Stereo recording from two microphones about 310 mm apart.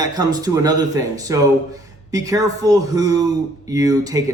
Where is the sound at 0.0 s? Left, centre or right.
Centre.